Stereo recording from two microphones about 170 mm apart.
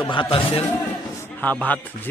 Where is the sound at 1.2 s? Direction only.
10° left (ahead or behind).